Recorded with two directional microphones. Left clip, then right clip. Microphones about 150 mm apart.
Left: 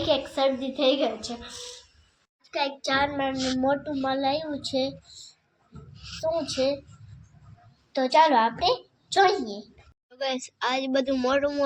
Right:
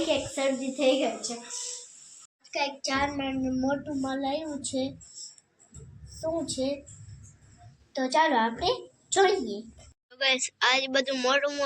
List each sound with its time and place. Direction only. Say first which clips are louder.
0.0 s a woman's voice: left 3 dB; 15° left (ahead or behind)
2.5 s a child's voice: left 3 dB; centre (ahead or behind)
6.2 s a woman's voice: left 4 dB; 5° left (ahead or behind)
7.9 s a child's voice: left 5 dB; 10° left (ahead or behind)
10.1 s a woman's voice: right 4 dB; 45° left (ahead or behind)